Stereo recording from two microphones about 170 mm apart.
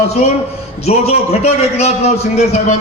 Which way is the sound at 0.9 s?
35° left (ahead or behind).